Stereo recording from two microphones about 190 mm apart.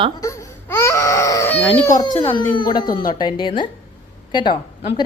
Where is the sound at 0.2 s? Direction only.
15° left (ahead or behind).